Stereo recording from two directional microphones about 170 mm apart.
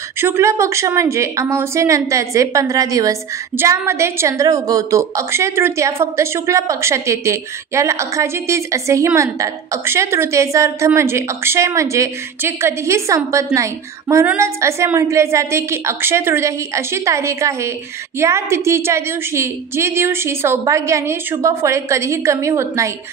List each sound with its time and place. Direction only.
0.2 s a woman's voice: 15° right (ahead or behind)